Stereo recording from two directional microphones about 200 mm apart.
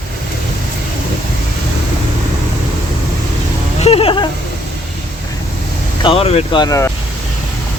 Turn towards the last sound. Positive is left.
turn(degrees=15)  # may be behind; listen again after turning